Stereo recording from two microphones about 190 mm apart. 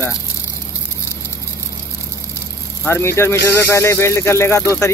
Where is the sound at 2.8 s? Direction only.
15° left (ahead or behind).